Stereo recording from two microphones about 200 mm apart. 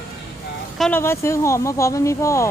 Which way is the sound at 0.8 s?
10° left (ahead or behind).